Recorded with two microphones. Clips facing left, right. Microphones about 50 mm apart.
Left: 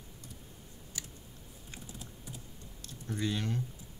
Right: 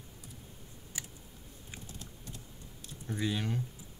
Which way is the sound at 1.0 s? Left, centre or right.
Right.